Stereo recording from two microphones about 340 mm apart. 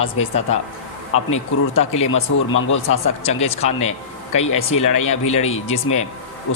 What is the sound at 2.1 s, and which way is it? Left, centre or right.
Speech, left.